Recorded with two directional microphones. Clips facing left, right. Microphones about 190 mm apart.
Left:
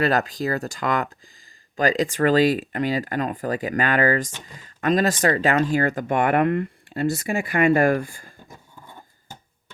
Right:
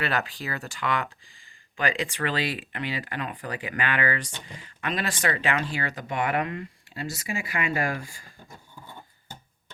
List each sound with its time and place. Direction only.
0.0 s speech: 40° left (ahead or behind)